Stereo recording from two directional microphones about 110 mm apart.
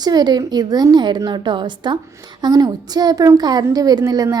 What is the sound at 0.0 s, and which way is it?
A woman's voice, 40° right (ahead or behind).